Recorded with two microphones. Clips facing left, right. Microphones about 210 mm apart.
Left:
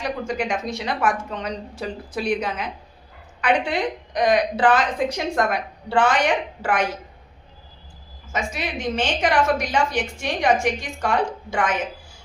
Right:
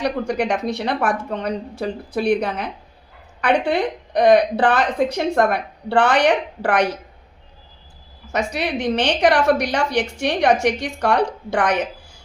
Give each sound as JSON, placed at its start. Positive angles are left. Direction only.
{"t": 0.0, "sound": "a woman's voice", "side_deg": -70}
{"t": 8.3, "sound": "a woman's voice", "side_deg": -70}